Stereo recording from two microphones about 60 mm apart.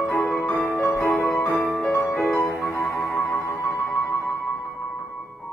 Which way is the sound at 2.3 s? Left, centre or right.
Left.